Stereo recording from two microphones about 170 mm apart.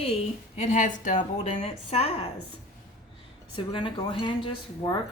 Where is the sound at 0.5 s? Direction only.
45° left (ahead or behind).